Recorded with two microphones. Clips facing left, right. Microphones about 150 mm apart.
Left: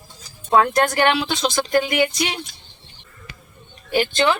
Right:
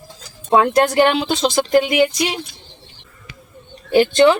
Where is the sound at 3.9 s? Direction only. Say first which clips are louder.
Right 7 dB; 25° right (ahead or behind).